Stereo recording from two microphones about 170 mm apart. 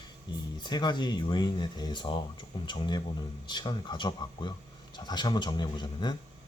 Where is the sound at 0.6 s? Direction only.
25° left (ahead or behind).